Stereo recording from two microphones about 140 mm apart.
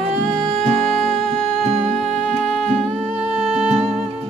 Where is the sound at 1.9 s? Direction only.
5° left (ahead or behind).